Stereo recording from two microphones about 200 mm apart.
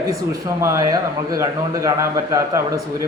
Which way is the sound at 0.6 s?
15° right (ahead or behind).